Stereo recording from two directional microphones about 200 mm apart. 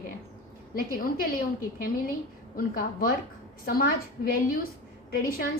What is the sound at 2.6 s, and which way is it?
A woman's voice, 45° left (ahead or behind).